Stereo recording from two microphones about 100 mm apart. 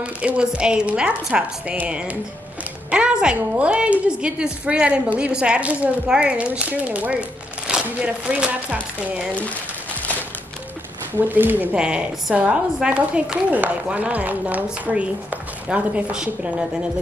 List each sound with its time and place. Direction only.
0.0 s a woman's voice: 10° right (ahead or behind)
11.2 s a woman's voice: 20° right (ahead or behind)